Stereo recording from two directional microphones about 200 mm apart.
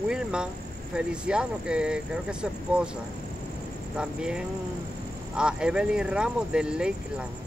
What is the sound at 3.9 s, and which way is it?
Speech, 5° right (ahead or behind).